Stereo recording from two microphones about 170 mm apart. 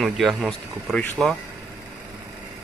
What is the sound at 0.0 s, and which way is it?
Speech, centre (ahead or behind).